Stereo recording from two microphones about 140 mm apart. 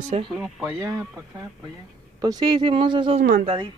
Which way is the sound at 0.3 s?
Centre (ahead or behind).